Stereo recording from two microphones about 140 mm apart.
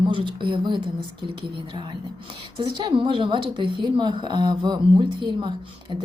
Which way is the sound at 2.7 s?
35° right (ahead or behind).